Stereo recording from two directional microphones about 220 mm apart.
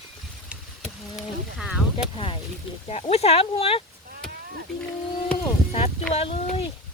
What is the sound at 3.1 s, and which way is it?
Speech, 30° left (ahead or behind).